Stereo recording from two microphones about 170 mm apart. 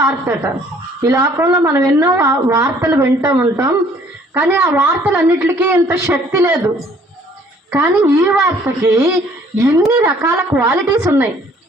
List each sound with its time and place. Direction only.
1.0 s a woman's voice: 20° right (ahead or behind)
2.9 s a woman's voice: 10° right (ahead or behind)
7.7 s a woman's voice: 15° right (ahead or behind)